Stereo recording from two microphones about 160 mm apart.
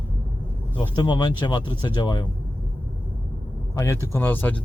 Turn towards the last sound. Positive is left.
turn(degrees=10)  # may be behind; listen again after turning